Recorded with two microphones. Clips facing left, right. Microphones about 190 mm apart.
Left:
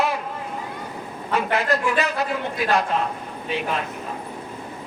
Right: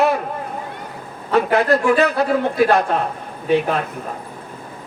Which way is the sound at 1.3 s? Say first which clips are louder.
Right 7 dB; 40° right (ahead or behind).